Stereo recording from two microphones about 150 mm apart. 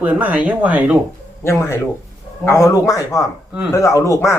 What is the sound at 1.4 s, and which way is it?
Speech, 15° left (ahead or behind).